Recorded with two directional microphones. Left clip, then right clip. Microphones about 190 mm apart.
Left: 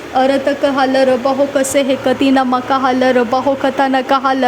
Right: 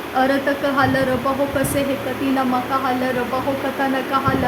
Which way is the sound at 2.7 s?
40° left (ahead or behind).